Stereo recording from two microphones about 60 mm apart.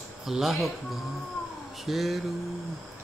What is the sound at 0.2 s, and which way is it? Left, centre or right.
Speech, centre.